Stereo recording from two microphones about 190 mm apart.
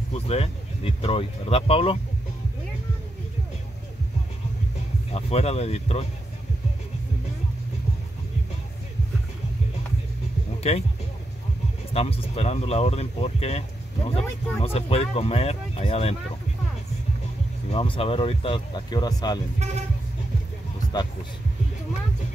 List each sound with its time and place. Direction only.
0.1 s speech: 30° left (ahead or behind)
5.1 s speech: 35° left (ahead or behind)
10.7 s speech: 35° left (ahead or behind)
11.9 s speech: 30° left (ahead or behind)
17.6 s speech: 30° left (ahead or behind)